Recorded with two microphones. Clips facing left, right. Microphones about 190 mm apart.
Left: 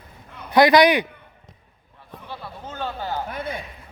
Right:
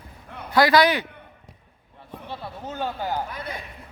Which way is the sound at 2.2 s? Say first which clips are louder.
Right 2 dB; 15° right (ahead or behind).